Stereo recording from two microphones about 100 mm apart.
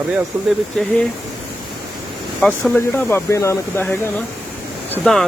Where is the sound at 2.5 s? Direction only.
15° left (ahead or behind).